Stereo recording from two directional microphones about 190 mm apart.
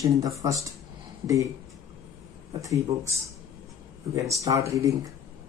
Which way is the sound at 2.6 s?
15° right (ahead or behind).